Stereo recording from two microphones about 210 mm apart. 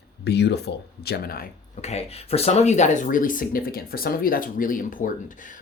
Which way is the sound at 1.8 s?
30° left (ahead or behind).